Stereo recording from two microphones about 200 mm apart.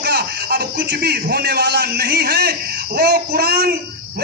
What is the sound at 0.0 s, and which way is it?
A man's voice, 55° right (ahead or behind).